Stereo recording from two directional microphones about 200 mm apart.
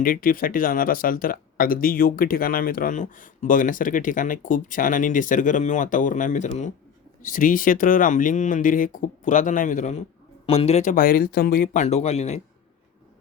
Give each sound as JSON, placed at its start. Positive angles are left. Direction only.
{"t": 0.0, "sound": "speech", "side_deg": 45}